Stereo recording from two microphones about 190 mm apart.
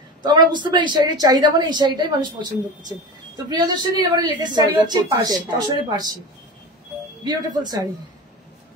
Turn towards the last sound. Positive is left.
turn(degrees=-20)  # may be behind; listen again after turning